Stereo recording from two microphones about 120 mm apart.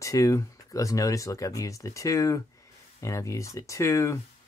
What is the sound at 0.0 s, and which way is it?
Speech, 25° left (ahead or behind).